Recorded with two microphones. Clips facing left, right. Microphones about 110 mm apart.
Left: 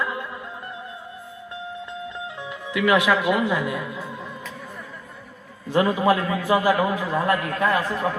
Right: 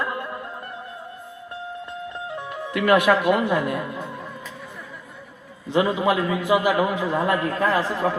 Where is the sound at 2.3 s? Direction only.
50° right (ahead or behind).